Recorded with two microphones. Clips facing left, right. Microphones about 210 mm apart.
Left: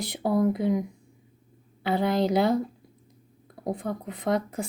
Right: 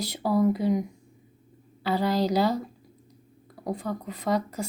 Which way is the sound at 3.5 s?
25° left (ahead or behind).